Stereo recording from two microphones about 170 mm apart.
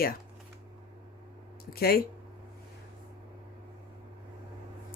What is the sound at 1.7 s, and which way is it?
Speech, 65° left (ahead or behind).